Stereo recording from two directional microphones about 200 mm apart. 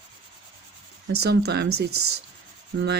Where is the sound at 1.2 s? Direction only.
55° right (ahead or behind).